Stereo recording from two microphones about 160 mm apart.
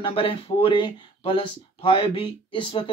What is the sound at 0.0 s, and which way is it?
Speech, 35° left (ahead or behind).